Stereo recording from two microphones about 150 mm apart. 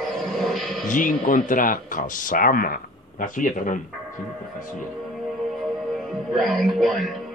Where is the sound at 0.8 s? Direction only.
60° left (ahead or behind).